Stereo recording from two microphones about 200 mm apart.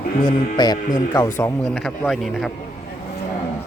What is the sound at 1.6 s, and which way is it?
Speech, centre (ahead or behind).